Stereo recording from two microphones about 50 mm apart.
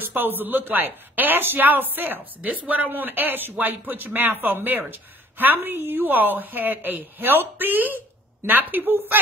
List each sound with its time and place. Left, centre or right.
0.0 s speech: right
2.6 s speech: right
2.9 s speech: right